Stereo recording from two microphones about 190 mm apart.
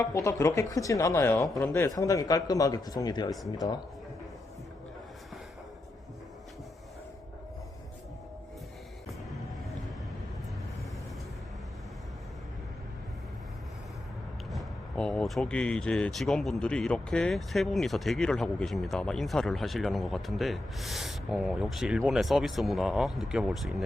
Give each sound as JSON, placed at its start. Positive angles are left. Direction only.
{"t": 0.0, "sound": "speech", "side_deg": 15}
{"t": 14.5, "sound": "speech", "side_deg": 0}